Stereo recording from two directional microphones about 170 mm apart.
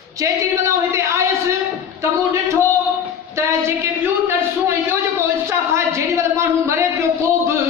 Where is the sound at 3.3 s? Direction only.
15° right (ahead or behind).